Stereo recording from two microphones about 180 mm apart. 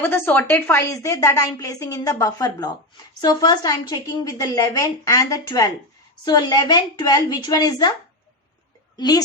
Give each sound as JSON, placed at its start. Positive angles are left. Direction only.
{"t": 0.0, "sound": "a woman's voice", "side_deg": 10}
{"t": 9.0, "sound": "a woman's voice", "side_deg": 20}